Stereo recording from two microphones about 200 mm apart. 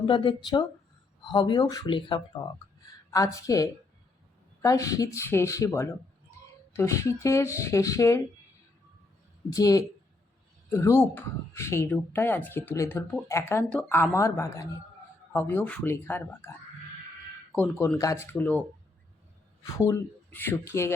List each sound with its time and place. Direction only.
0.0 s speech: 25° left (ahead or behind)
9.5 s speech: 15° left (ahead or behind)
17.5 s speech: 10° left (ahead or behind)
19.7 s speech: 15° left (ahead or behind)